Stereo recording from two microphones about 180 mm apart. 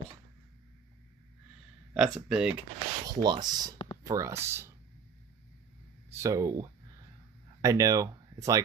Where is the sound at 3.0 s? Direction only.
25° right (ahead or behind).